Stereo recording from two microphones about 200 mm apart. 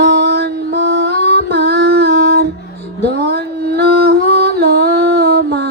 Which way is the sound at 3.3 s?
55° right (ahead or behind).